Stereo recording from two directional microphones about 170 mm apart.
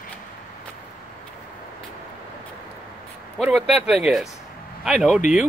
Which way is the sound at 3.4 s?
Centre (ahead or behind).